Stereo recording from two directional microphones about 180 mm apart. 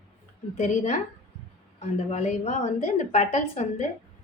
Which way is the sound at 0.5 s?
40° left (ahead or behind).